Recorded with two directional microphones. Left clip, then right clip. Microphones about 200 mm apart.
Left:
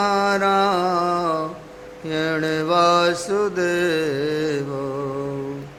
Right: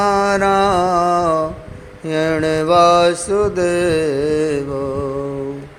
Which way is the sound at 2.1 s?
20° right (ahead or behind).